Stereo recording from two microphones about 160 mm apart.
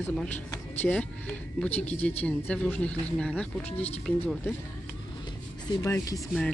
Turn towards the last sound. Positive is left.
turn(degrees=0)  # may be behind; listen again after turning